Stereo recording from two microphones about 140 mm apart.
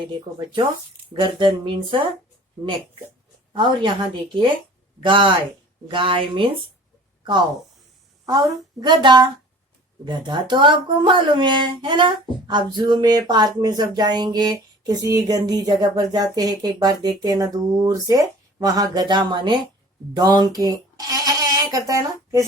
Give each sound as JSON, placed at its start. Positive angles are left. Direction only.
{"t": 0.0, "sound": "a woman's voice", "side_deg": -35}
{"t": 3.5, "sound": "a woman's voice", "side_deg": -35}
{"t": 5.0, "sound": "a woman's voice", "side_deg": -35}
{"t": 8.3, "sound": "a woman's voice", "side_deg": -30}